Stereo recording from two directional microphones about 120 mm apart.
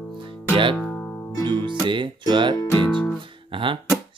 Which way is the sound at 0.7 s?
10° left (ahead or behind).